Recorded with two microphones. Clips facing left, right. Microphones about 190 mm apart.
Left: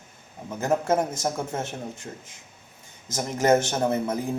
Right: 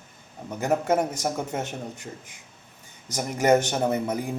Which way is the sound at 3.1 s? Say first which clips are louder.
Even; 15° right (ahead or behind).